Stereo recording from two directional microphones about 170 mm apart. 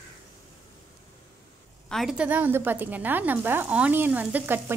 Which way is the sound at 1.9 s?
Centre (ahead or behind).